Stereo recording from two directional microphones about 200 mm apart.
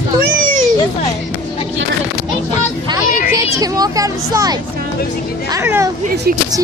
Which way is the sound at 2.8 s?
15° right (ahead or behind).